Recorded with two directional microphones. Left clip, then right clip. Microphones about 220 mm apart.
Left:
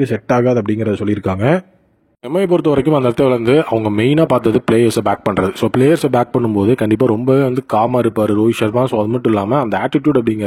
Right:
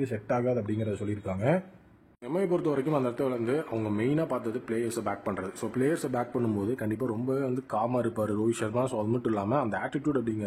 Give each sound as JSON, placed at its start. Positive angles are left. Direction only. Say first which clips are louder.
{"t": 0.0, "sound": "speech", "louder": "left 15 dB", "side_deg": 45}